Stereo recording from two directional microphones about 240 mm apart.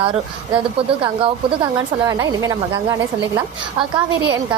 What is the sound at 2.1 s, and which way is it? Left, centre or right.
Speech, centre.